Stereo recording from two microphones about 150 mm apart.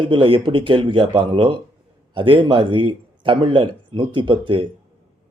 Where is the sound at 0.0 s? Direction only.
35° right (ahead or behind).